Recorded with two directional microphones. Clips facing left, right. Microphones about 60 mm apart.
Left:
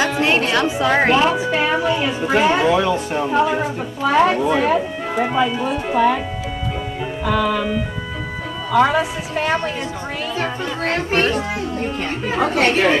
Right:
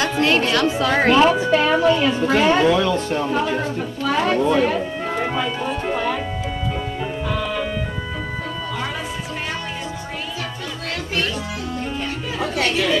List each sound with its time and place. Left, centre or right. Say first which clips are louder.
0.0 s music: left 1 dB; left
0.5 s speech: left 1 dB; centre
7.2 s music: left 9 dB; left
8.7 s speech: left 16 dB; left
10.9 s speech: left 6 dB; left